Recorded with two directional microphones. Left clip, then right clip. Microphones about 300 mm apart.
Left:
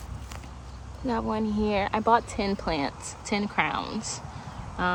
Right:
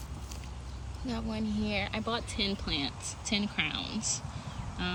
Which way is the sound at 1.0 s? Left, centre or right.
Centre.